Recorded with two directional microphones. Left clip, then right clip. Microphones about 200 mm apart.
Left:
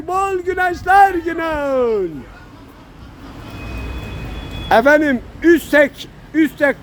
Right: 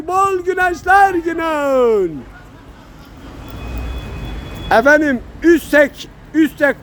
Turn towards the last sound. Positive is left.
turn(degrees=-5)  # may be behind; listen again after turning